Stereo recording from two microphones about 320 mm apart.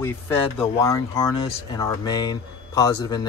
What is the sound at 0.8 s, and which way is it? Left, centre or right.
Speech, centre.